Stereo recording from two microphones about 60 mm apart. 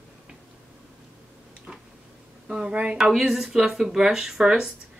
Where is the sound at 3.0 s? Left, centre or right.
Centre.